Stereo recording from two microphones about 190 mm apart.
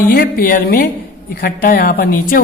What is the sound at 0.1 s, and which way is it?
A woman's voice, 50° left (ahead or behind).